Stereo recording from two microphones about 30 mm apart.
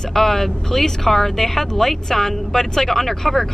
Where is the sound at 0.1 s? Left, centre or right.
Centre.